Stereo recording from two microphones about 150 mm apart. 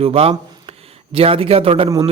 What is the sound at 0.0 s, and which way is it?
A man's voice, 40° right (ahead or behind).